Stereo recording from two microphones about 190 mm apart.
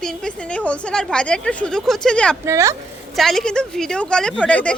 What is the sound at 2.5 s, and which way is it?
Speech, 15° right (ahead or behind).